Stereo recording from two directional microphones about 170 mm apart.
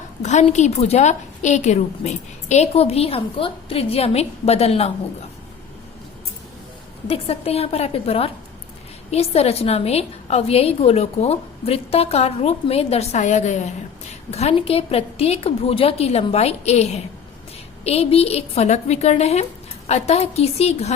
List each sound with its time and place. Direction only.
0.2 s a woman's voice: 45° left (ahead or behind)
7.1 s a woman's voice: 35° left (ahead or behind)